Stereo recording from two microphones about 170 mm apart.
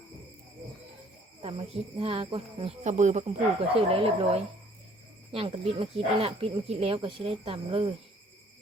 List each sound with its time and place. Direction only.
1.4 s speech: 35° right (ahead or behind)
2.8 s speech: 45° right (ahead or behind)